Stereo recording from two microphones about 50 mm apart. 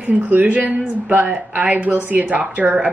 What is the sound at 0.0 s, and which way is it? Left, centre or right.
A woman's voice, right.